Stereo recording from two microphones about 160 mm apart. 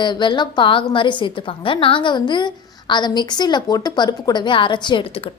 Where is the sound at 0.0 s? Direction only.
30° left (ahead or behind).